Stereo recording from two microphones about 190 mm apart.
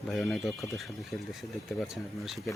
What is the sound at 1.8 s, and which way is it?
Speech, centre (ahead or behind).